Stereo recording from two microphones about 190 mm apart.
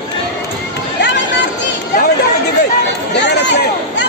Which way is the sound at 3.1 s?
65° left (ahead or behind).